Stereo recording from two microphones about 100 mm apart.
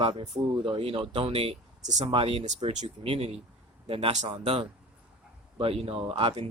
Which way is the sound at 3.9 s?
70° right (ahead or behind).